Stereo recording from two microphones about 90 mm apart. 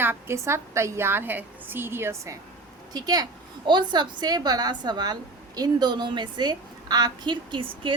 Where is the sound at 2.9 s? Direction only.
50° right (ahead or behind).